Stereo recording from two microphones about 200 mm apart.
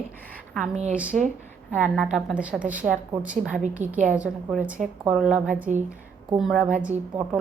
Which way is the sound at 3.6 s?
40° right (ahead or behind).